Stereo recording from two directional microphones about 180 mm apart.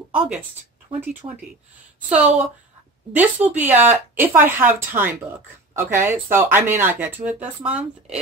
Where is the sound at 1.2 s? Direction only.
25° right (ahead or behind).